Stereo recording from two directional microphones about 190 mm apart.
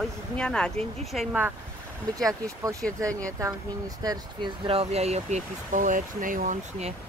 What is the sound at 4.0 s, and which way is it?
Speech, 20° right (ahead or behind).